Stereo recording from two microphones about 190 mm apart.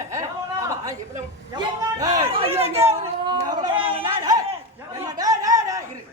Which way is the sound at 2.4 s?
30° right (ahead or behind).